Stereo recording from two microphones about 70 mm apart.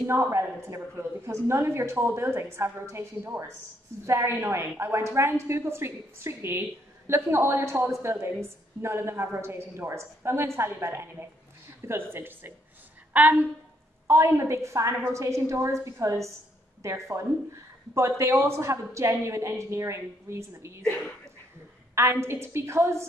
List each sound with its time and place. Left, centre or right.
0.0 s a woman's voice: right
14.0 s a woman's voice: right
21.9 s a woman's voice: right